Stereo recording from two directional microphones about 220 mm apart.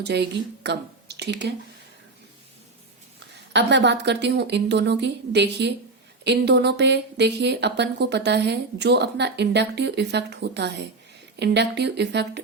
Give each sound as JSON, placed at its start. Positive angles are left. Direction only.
{"t": 0.0, "sound": "speech", "side_deg": -50}
{"t": 3.5, "sound": "a woman's voice", "side_deg": -50}